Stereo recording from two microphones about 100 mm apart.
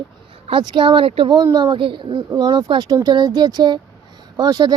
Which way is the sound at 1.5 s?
50° right (ahead or behind).